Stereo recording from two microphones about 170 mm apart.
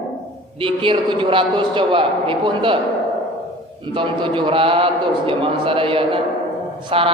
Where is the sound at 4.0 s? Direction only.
30° right (ahead or behind).